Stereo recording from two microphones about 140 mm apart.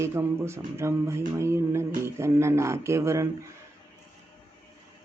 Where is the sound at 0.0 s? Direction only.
20° right (ahead or behind).